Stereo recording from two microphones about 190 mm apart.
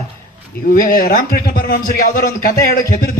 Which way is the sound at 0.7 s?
50° left (ahead or behind).